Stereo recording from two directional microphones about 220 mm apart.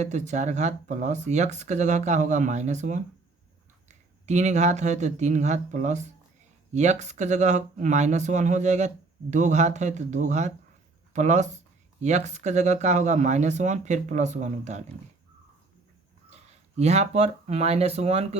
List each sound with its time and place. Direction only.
0.0 s speech: 30° right (ahead or behind)
16.3 s speech: 30° right (ahead or behind)